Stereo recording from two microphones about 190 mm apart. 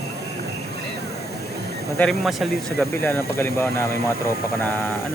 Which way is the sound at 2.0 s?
Centre (ahead or behind).